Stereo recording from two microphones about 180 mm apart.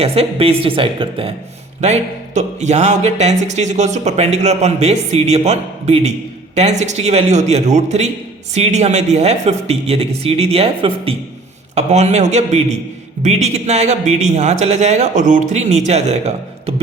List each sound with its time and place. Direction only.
0.0 s speech: 35° right (ahead or behind)